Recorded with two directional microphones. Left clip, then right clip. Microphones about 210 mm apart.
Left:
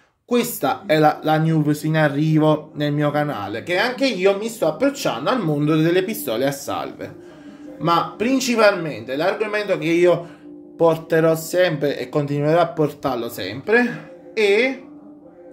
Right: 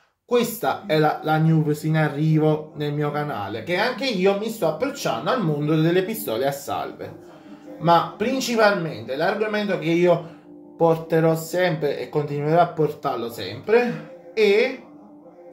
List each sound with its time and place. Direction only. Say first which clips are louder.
0.3 s speech: left 1 dB; 55° left (ahead or behind)